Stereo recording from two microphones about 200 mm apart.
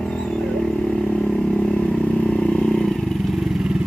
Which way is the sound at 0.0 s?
5° left (ahead or behind).